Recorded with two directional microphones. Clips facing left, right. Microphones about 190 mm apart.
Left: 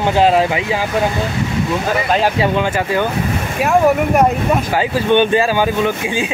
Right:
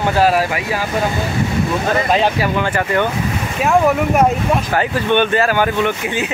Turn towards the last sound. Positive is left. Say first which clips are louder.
# left 1 dB
turn(degrees=15)  # may be behind; listen again after turning